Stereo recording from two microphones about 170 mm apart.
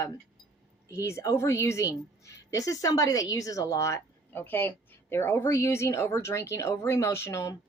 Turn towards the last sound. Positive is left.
turn(degrees=15)  # may be behind; listen again after turning